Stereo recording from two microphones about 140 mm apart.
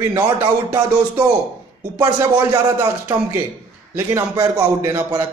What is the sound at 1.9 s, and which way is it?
A man's voice, 25° right (ahead or behind).